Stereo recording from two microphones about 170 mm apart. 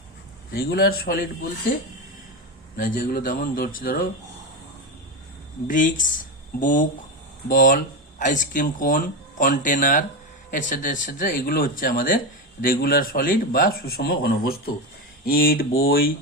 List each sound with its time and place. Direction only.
0.5 s speech: 65° left (ahead or behind)
2.7 s speech: 55° left (ahead or behind)
5.6 s speech: 50° left (ahead or behind)